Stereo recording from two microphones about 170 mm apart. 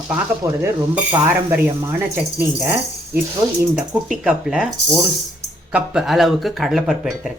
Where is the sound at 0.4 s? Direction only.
15° right (ahead or behind).